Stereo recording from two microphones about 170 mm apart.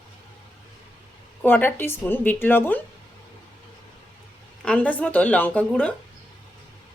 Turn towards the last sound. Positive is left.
turn(degrees=5)  # may be behind; listen again after turning